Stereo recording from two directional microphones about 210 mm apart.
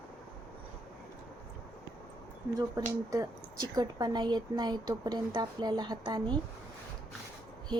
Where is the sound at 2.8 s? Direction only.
15° right (ahead or behind).